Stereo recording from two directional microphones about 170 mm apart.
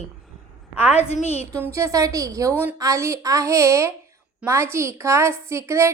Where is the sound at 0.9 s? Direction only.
40° left (ahead or behind).